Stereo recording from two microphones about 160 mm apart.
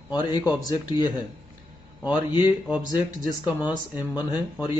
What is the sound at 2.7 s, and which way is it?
Speech, 25° left (ahead or behind).